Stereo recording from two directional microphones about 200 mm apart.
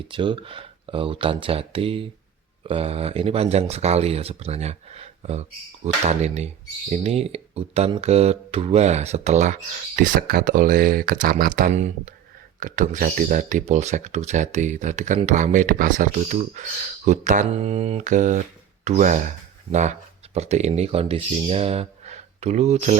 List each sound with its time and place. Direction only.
0.1 s speech: 25° right (ahead or behind)